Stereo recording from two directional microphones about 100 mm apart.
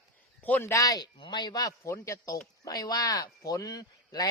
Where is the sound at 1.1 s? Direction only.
50° left (ahead or behind).